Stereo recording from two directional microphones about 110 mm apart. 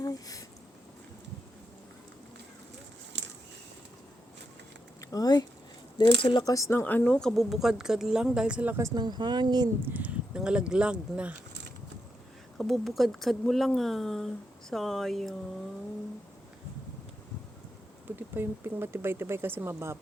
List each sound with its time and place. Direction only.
0.0 s a sound: 35° left (ahead or behind)
4.9 s speech: 35° left (ahead or behind)
6.5 s a woman's voice: 25° left (ahead or behind); by 8.7 s 10° right (ahead or behind)
9.0 s speech: 40° right (ahead or behind)
9.8 s speech: 15° right (ahead or behind)
12.5 s a woman's voice: centre (ahead or behind)
18.2 s speech: 20° right (ahead or behind)